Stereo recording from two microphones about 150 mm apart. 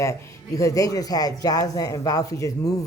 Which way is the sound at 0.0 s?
20° left (ahead or behind).